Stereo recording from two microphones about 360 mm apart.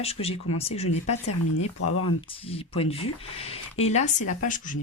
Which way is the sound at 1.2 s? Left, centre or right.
Left.